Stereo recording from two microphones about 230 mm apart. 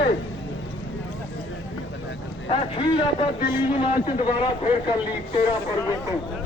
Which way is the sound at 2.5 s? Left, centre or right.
Left.